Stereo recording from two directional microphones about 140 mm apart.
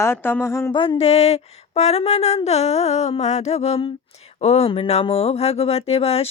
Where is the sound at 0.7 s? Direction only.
40° left (ahead or behind).